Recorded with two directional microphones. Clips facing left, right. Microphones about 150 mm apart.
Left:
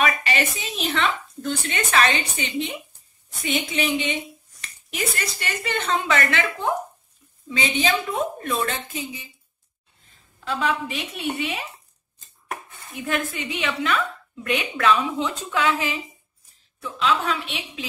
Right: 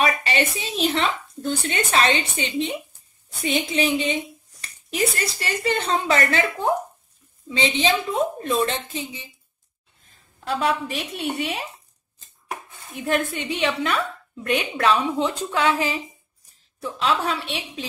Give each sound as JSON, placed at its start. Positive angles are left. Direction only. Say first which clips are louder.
{"t": 0.0, "sound": "a woman's voice", "louder": "right 1 dB", "side_deg": -30}
{"t": 7.4, "sound": "a woman's voice", "louder": "right 2 dB", "side_deg": -25}
{"t": 10.4, "sound": "a woman's voice", "louder": "right 2 dB", "side_deg": -40}
{"t": 13.0, "sound": "a woman's voice", "louder": "right 3 dB", "side_deg": -35}